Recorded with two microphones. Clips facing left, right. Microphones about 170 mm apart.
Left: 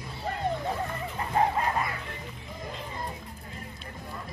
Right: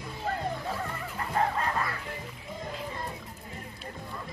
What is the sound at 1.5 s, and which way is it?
Bow-wow, 15° left (ahead or behind).